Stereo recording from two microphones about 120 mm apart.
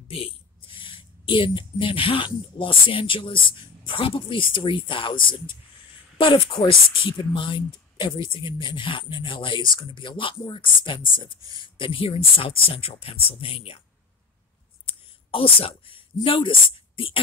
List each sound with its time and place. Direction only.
0.1 s a woman's voice: 50° left (ahead or behind)
14.9 s speech: 50° left (ahead or behind)